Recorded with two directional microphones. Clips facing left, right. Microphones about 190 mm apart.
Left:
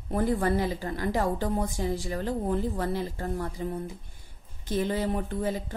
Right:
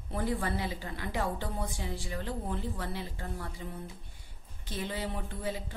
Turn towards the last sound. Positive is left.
turn(degrees=45)  # may be behind; listen again after turning